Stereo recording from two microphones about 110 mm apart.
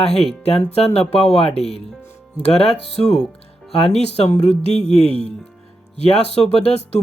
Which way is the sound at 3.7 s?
65° left (ahead or behind).